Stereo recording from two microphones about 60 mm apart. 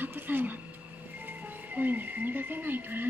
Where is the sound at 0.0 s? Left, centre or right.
Right.